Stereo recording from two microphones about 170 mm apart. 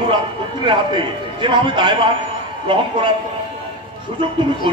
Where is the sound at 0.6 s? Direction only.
30° right (ahead or behind).